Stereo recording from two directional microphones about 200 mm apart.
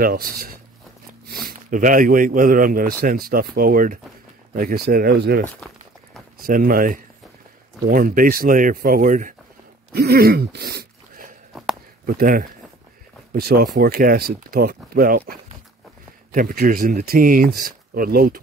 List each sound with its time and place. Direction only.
0.0 s speech: 45° right (ahead or behind)
6.4 s speech: 45° right (ahead or behind)
9.9 s throat clearing: 50° right (ahead or behind)
12.1 s speech: 45° right (ahead or behind)